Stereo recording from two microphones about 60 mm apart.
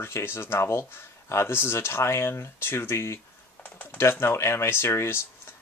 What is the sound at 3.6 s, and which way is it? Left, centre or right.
Typing, left.